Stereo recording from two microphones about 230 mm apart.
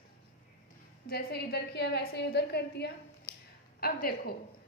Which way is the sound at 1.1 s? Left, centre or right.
Left.